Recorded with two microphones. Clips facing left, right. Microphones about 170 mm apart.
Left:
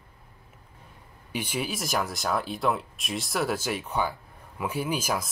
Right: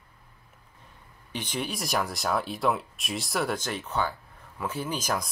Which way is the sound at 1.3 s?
10° left (ahead or behind).